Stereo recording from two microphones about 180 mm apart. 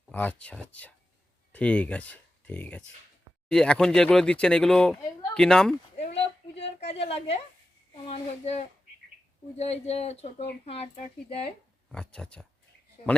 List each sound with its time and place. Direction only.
0.1 s speech: 10° left (ahead or behind)
6.0 s a sound: 35° left (ahead or behind)
8.0 s speech: 35° left (ahead or behind)
11.9 s speech: 5° left (ahead or behind)